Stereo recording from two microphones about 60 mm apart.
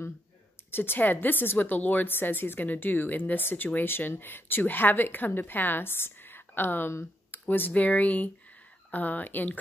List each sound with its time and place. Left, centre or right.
0.7 s a woman's voice: left
7.2 s a sound: left
7.7 s speech: left